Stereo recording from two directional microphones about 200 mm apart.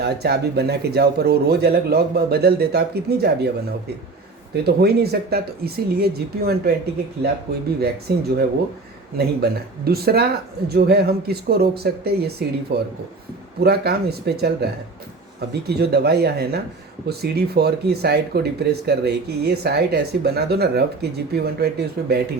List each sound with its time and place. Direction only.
0.0 s speech: 55° right (ahead or behind)
7.8 s speech: 50° right (ahead or behind)